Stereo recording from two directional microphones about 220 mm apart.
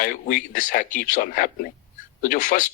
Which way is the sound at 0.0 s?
40° left (ahead or behind).